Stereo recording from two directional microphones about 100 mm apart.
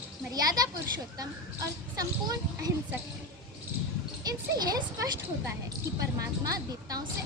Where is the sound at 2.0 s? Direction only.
40° right (ahead or behind).